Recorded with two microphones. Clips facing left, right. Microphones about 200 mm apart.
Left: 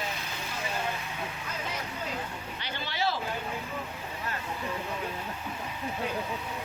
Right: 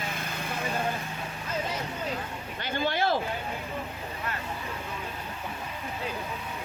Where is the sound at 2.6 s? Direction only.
50° right (ahead or behind).